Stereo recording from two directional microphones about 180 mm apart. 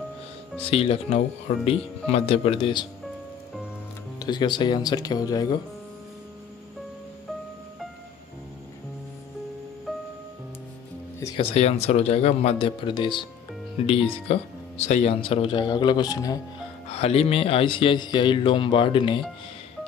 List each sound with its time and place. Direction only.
0.7 s speech: 35° left (ahead or behind)
4.2 s speech: 25° left (ahead or behind)
9.9 s music: centre (ahead or behind)
11.3 s speech: 35° left (ahead or behind); by 16.3 s 20° left (ahead or behind)
16.9 s speech: 35° left (ahead or behind)